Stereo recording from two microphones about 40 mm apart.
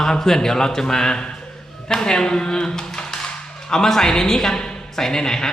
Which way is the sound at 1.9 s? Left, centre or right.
Centre.